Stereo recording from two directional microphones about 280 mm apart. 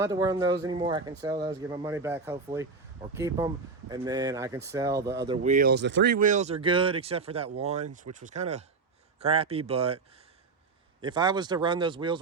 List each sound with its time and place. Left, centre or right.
0.0 s speech: centre
11.0 s speech: centre